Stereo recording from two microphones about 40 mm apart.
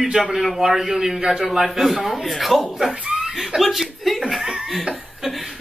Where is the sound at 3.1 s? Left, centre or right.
Right.